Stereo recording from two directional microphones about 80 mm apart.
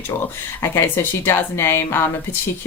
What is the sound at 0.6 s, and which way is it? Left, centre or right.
Speech, left.